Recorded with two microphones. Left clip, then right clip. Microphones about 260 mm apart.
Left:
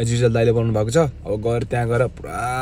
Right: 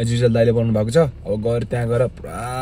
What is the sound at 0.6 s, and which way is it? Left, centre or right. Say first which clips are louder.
A man's voice: right 1 dB; centre.